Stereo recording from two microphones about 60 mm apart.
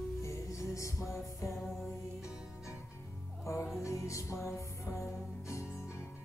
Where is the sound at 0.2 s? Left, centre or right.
Left.